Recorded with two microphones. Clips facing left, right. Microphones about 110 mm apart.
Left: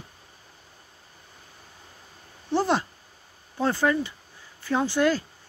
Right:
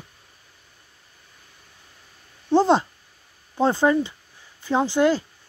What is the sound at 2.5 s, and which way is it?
Speech, 25° right (ahead or behind).